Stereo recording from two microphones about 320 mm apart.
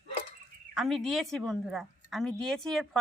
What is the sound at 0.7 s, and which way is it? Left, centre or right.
A woman's voice, centre.